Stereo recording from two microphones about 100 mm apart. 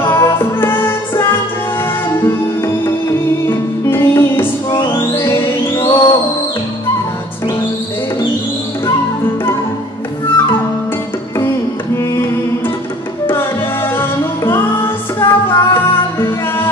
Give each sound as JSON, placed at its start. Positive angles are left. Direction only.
{"t": 0.0, "sound": "music", "side_deg": 25}
{"t": 2.2, "sound": "music", "side_deg": 25}
{"t": 11.9, "sound": "music", "side_deg": 25}